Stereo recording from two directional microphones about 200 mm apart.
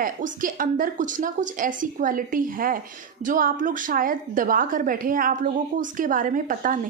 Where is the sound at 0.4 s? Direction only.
45° right (ahead or behind).